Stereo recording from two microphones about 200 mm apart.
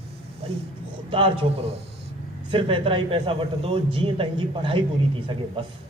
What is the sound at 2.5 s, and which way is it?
Speech, 25° right (ahead or behind).